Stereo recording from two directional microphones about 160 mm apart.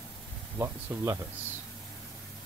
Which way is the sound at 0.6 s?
20° right (ahead or behind).